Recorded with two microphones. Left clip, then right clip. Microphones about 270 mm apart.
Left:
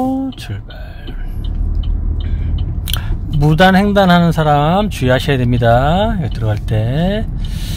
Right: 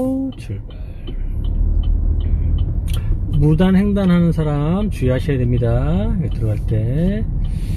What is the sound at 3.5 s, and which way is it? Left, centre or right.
Speech, left.